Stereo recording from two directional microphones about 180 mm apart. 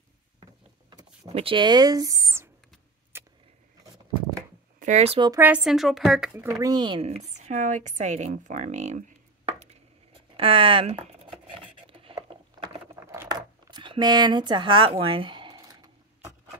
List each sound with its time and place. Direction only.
0.4 s vehicle: 25° right (ahead or behind)
1.3 s speech: 30° right (ahead or behind); by 2.5 s 15° right (ahead or behind)
3.1 s vehicle: 15° right (ahead or behind)
4.7 s speech: 40° right (ahead or behind)
5.3 s speech: 10° right (ahead or behind); by 9.1 s 40° right (ahead or behind)
10.3 s a sound: 30° right (ahead or behind)
13.0 s a sound: 15° right (ahead or behind)